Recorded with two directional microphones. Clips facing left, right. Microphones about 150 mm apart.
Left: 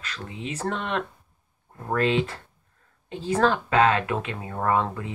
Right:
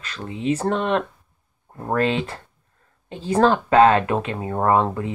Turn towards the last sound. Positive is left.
turn(degrees=-35)  # may be behind; listen again after turning